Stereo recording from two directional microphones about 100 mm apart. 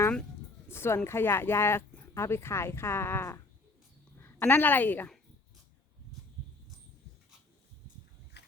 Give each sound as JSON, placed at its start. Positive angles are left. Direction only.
{"t": 0.7, "sound": "a woman's voice", "side_deg": 25}